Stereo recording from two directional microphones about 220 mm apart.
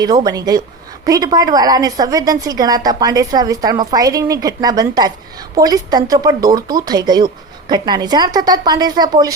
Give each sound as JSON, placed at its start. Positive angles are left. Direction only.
{"t": 0.0, "sound": "a woman's voice", "side_deg": -15}